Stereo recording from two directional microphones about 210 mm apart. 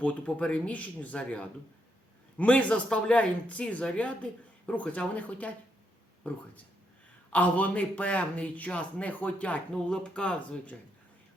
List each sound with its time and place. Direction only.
0.0 s a man's voice: 5° left (ahead or behind)